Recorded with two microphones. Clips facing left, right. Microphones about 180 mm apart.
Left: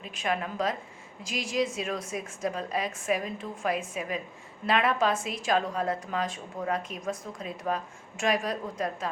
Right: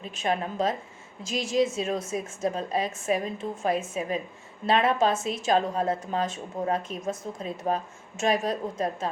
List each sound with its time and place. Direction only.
0.0 s a woman's voice: 30° right (ahead or behind)